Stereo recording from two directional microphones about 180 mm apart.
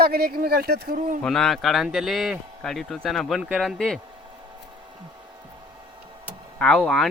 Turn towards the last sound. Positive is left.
turn(degrees=0)  # may be behind; listen again after turning